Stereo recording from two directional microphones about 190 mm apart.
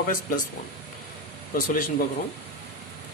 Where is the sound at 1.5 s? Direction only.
45° left (ahead or behind).